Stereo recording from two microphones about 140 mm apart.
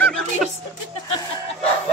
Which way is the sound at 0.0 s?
5° left (ahead or behind).